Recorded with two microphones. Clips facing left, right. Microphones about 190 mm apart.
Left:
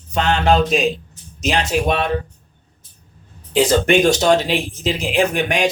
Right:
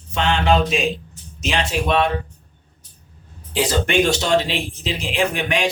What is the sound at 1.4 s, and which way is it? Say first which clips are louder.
Speech: left 3 dB; 40° left (ahead or behind).